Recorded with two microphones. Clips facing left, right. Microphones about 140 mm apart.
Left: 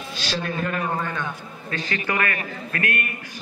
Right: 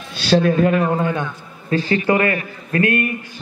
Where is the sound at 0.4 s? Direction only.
40° right (ahead or behind).